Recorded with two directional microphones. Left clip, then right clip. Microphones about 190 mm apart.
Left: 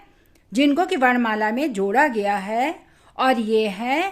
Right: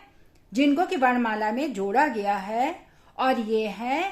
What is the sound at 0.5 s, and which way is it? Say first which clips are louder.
Speech: left 4 dB; 40° left (ahead or behind).